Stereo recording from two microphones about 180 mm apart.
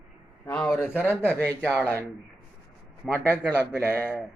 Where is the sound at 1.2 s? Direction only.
10° left (ahead or behind).